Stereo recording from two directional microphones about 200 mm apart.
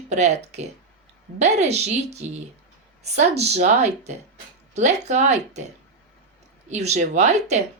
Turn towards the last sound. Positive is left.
turn(degrees=-35)  # may be behind; listen again after turning